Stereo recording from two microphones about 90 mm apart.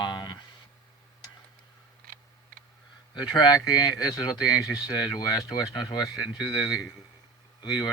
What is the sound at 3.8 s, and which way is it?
Speech, 45° left (ahead or behind).